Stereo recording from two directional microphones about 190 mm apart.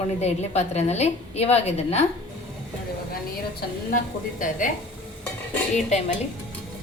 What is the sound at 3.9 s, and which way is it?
Speech, 45° left (ahead or behind).